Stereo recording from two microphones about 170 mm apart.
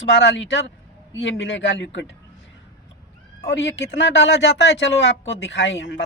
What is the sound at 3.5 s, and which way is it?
Speech, 90° left.